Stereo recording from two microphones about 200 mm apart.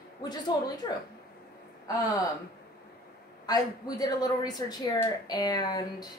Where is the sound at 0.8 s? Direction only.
20° left (ahead or behind).